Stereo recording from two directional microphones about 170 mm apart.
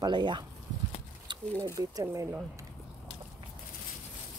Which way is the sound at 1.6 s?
20° right (ahead or behind).